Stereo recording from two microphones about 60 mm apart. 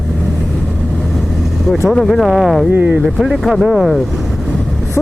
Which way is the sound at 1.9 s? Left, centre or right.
Centre.